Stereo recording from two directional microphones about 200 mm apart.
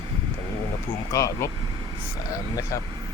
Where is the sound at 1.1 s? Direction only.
15° left (ahead or behind).